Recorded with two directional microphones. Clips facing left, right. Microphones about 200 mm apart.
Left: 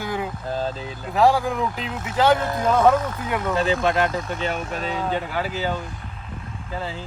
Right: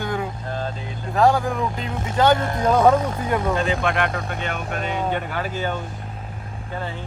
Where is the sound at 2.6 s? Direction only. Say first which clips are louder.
Right 1 dB; 15° right (ahead or behind).